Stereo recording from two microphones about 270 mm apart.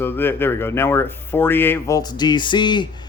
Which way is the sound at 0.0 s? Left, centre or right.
Centre.